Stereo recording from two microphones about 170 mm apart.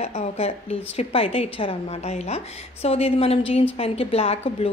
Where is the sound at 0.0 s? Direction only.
40° left (ahead or behind).